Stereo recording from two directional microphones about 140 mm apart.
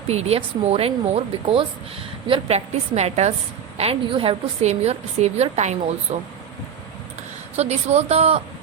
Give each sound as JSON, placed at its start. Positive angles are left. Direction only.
{"t": 0.1, "sound": "a woman's voice", "side_deg": -50}
{"t": 7.5, "sound": "a woman's voice", "side_deg": -50}